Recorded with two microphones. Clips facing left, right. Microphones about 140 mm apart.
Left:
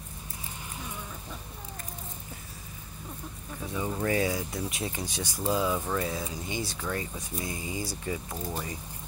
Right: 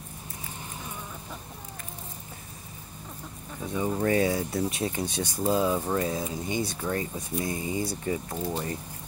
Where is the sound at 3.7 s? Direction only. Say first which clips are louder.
Right 4 dB; 25° right (ahead or behind).